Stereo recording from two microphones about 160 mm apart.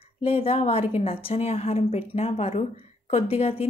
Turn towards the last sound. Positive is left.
turn(degrees=40)  # may be behind; listen again after turning